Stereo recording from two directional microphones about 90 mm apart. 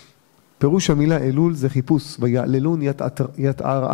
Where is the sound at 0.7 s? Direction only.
15° left (ahead or behind).